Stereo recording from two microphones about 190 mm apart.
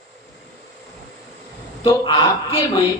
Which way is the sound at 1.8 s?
25° left (ahead or behind).